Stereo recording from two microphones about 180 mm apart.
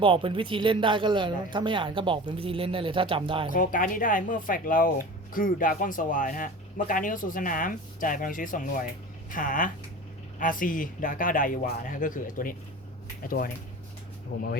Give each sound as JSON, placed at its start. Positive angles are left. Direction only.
{"t": 0.0, "sound": "a man's voice", "side_deg": -30}
{"t": 3.5, "sound": "speech", "side_deg": 50}